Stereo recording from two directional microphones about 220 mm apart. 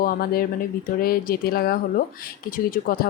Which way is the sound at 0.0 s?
40° left (ahead or behind).